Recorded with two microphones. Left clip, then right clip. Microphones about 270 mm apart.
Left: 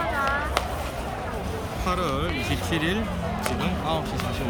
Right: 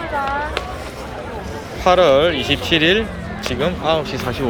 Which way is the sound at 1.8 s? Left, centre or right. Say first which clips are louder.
Right 16 dB; centre.